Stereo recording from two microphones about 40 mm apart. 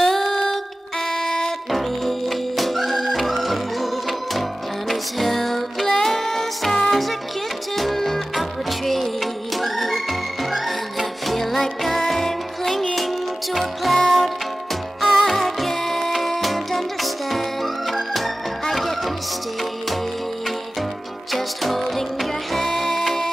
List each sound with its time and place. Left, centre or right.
0.0 s music: centre
1.1 s music: centre
1.7 s music: centre
21.3 s music: centre